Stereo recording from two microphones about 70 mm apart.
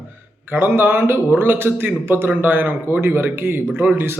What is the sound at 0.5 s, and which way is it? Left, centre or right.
A man's voice, right.